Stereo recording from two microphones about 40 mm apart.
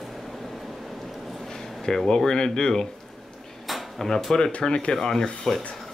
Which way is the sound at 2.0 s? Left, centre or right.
Centre.